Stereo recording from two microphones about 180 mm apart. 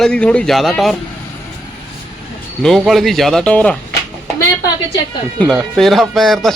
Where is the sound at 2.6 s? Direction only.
Centre (ahead or behind).